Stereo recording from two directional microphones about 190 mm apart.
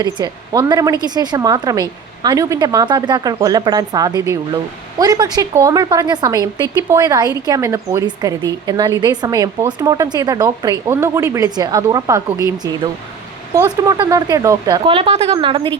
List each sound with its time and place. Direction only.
0.0 s speech: 20° right (ahead or behind)
13.5 s speech: 15° right (ahead or behind)
14.8 s speech: 30° right (ahead or behind)